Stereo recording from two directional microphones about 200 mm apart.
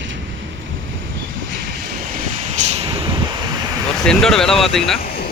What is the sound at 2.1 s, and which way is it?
Vehicle, 35° right (ahead or behind).